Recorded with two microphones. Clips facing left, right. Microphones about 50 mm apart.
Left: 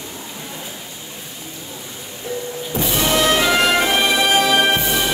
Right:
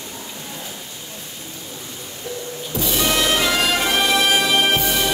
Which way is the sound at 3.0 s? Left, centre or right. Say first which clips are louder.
Left 3 dB; centre.